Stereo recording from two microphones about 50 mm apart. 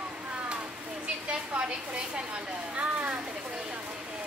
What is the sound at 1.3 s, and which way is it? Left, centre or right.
A woman's voice, right.